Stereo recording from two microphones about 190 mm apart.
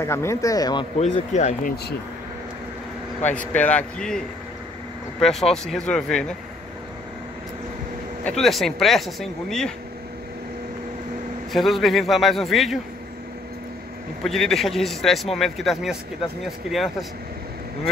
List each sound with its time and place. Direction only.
0.0 s speech: 15° left (ahead or behind)
0.9 s speech: 35° left (ahead or behind)
3.3 s speech: 5° left (ahead or behind)
5.2 s a man's voice: centre (ahead or behind)
8.3 s a man's voice: centre (ahead or behind)
11.5 s a man's voice: centre (ahead or behind)
14.2 s a man's voice: centre (ahead or behind)